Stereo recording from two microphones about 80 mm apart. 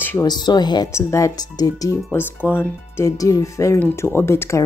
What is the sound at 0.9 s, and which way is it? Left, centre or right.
Speech, left.